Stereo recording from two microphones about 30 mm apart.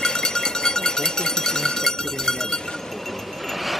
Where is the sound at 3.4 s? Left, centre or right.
Centre.